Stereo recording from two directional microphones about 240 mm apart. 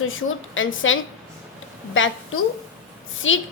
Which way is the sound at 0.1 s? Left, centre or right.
Left.